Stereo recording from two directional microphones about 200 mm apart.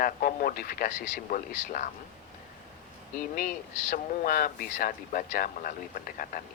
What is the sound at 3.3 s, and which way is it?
A man's voice, 45° left (ahead or behind).